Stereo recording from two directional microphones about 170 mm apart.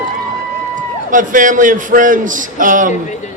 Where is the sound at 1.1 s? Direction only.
50° right (ahead or behind).